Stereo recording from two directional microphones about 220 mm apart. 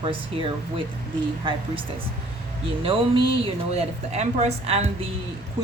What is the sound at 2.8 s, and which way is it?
Speech, 25° right (ahead or behind).